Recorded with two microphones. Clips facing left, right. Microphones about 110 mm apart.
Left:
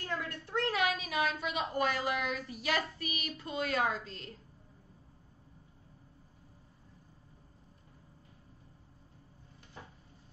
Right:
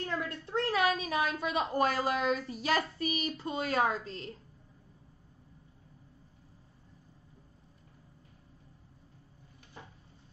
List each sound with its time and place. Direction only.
0.3 s a woman's voice: 30° right (ahead or behind)